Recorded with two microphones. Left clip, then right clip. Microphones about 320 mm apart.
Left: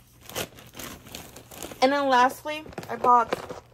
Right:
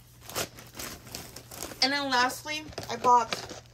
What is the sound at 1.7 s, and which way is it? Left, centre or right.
Speech, centre.